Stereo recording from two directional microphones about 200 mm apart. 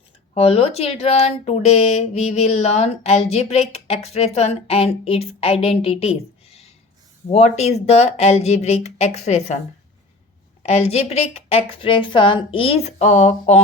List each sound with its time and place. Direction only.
0.3 s speech: 30° left (ahead or behind)
10.6 s speech: 30° left (ahead or behind)